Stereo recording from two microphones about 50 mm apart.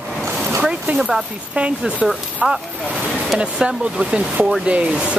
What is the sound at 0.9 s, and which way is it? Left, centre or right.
Speech, centre.